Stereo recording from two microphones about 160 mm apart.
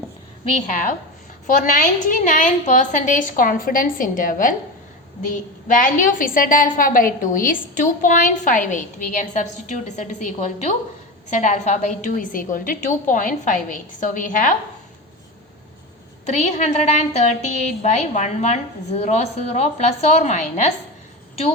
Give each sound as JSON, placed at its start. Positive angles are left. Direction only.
{"t": 0.5, "sound": "a woman's voice", "side_deg": 55}
{"t": 16.2, "sound": "a woman's voice", "side_deg": 45}